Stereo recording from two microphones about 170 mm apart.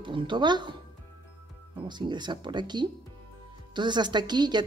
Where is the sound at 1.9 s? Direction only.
25° right (ahead or behind).